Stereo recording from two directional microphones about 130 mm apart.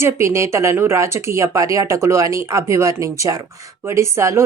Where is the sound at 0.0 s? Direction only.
20° right (ahead or behind).